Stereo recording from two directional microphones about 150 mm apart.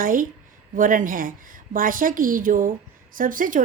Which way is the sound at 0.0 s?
65° right (ahead or behind).